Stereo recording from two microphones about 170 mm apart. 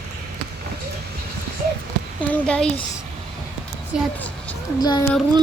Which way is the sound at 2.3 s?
5° left (ahead or behind).